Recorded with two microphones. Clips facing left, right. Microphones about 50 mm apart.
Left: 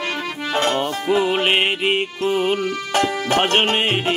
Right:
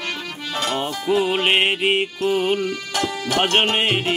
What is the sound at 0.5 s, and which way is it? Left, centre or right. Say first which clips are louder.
Music: left 4 dB; left.